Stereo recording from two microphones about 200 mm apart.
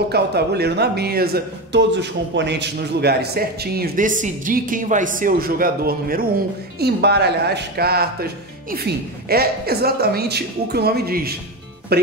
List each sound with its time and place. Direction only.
0.1 s speech: 55° right (ahead or behind)